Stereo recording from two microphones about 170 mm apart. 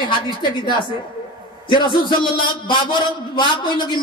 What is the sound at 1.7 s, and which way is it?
A man's voice, 25° left (ahead or behind).